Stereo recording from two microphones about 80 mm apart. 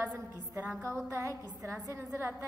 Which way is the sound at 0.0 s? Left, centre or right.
Right.